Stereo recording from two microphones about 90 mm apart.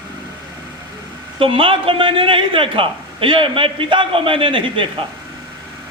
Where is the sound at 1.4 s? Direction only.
75° right (ahead or behind).